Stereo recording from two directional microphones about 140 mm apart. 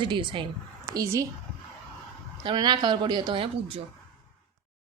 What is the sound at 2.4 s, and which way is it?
A woman's voice, 30° right (ahead or behind).